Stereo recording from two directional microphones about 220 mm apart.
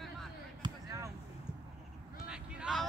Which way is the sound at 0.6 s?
15° right (ahead or behind).